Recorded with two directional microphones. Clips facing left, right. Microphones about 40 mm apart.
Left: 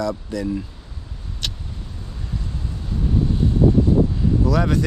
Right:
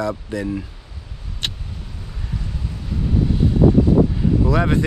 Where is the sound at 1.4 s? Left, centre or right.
Right.